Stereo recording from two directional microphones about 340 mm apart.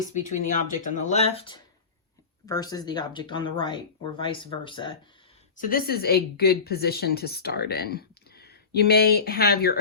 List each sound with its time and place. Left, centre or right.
0.0 s a woman's voice: left
5.5 s a woman's voice: left